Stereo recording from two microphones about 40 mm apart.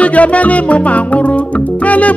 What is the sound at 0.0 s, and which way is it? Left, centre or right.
Music, left.